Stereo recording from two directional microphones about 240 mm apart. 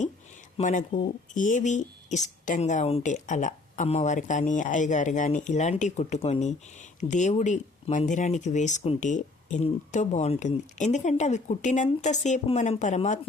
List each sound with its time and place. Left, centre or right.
0.5 s speech: left